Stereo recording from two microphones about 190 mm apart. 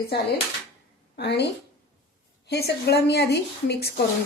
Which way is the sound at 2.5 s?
60° left (ahead or behind).